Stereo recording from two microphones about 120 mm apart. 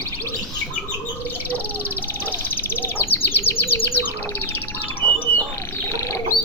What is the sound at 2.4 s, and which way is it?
Bird, 15° left (ahead or behind).